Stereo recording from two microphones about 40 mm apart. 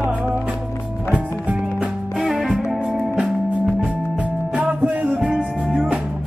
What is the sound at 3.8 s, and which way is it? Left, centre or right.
Music, right.